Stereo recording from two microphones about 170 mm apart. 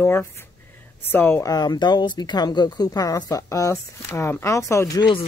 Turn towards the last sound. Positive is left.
turn(degrees=20)  # may be behind; listen again after turning